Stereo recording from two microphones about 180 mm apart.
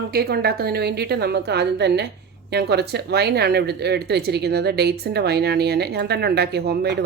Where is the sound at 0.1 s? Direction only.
60° right (ahead or behind).